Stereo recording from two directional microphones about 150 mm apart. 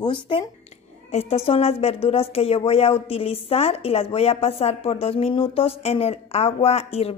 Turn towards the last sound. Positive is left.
turn(degrees=40)  # may be behind; listen again after turning